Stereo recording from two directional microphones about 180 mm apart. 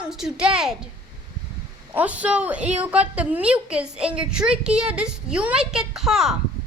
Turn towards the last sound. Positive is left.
turn(degrees=0)  # may be behind; listen again after turning